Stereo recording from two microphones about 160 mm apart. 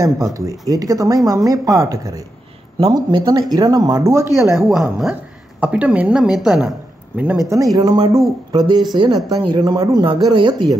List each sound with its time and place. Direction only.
0.0 s speech: 20° right (ahead or behind)
4.3 s a woman's voice: centre (ahead or behind)
7.7 s speech: 25° right (ahead or behind)